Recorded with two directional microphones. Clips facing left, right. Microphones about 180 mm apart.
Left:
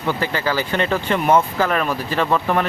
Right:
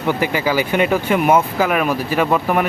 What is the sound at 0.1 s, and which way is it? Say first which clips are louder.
Speech: right 3 dB; 15° right (ahead or behind).